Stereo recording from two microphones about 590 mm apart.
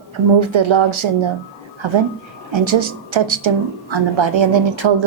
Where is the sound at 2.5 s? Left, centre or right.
Right.